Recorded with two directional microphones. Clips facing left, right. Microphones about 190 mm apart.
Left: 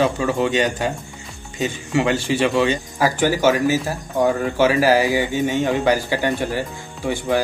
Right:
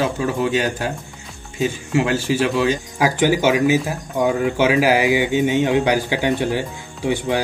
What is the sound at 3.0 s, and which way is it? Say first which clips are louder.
A man's voice: right 1 dB; 15° right (ahead or behind).